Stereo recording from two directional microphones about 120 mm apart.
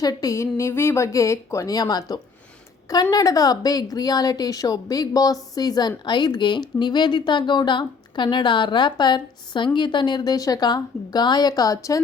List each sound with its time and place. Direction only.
0.0 s a woman's voice: 30° left (ahead or behind)